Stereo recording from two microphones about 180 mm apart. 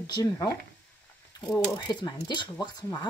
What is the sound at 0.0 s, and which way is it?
Speech, 20° left (ahead or behind).